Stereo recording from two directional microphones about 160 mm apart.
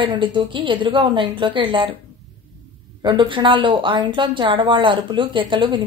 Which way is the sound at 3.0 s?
30° right (ahead or behind).